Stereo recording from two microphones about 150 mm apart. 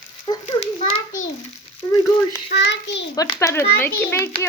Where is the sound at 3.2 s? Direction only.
20° left (ahead or behind).